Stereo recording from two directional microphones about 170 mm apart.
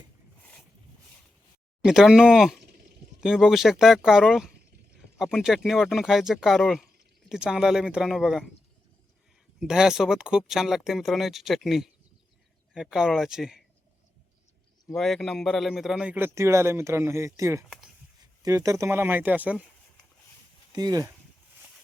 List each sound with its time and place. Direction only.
1.8 s speech: 5° right (ahead or behind)
9.6 s speech: 5° right (ahead or behind)
14.9 s a man's voice: centre (ahead or behind)
20.7 s speech: 20° right (ahead or behind)